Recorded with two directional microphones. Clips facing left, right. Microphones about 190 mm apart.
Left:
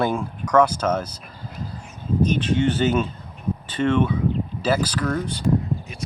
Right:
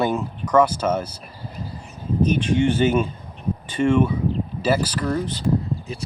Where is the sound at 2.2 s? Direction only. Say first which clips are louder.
Right 3 dB; 10° right (ahead or behind).